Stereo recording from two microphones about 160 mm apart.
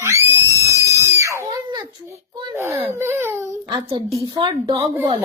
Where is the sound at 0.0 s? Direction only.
20° right (ahead or behind).